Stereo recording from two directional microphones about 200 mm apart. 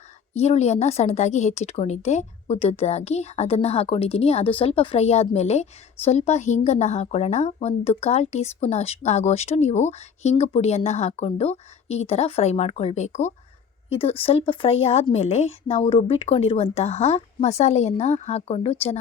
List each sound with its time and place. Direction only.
0.3 s a woman's voice: 35° left (ahead or behind)